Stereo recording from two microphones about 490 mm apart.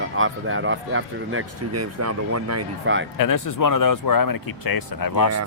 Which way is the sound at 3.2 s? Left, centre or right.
Left.